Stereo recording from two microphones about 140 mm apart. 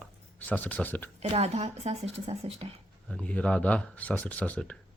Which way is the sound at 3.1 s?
10° left (ahead or behind).